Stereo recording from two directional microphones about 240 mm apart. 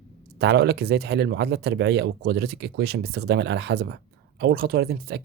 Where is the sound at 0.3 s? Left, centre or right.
Right.